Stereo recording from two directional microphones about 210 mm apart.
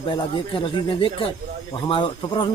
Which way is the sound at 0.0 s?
25° left (ahead or behind).